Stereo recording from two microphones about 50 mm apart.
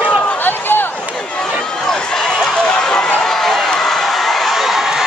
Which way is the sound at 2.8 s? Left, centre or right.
Centre.